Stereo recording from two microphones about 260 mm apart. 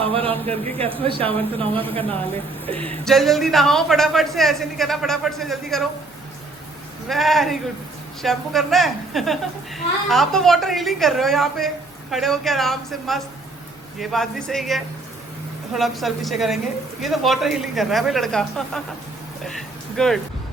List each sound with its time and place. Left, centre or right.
0.0 s speech: right
3.0 s a woman's voice: centre
7.1 s a woman's voice: centre
20.0 s a woman's voice: centre